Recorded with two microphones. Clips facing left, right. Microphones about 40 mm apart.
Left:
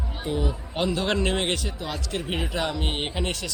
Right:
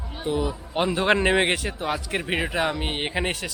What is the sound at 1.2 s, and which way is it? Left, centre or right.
Speech, centre.